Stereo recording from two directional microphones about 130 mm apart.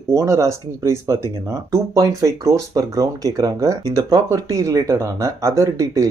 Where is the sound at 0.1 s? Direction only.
25° right (ahead or behind).